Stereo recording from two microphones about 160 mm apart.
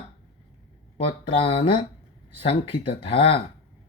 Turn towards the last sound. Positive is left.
turn(degrees=35)  # may be behind; listen again after turning